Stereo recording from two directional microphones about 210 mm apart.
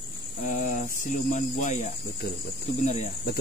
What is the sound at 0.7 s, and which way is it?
Speech, 40° left (ahead or behind).